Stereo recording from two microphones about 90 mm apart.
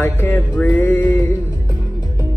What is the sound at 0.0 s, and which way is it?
Music, 20° left (ahead or behind).